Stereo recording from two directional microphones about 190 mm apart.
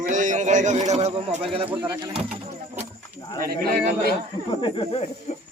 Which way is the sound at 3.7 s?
55° right (ahead or behind).